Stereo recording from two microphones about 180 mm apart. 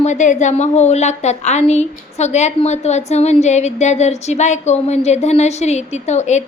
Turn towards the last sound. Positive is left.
turn(degrees=40)  # may be behind; listen again after turning